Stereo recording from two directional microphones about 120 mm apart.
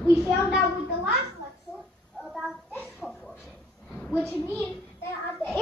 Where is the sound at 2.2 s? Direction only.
5° right (ahead or behind).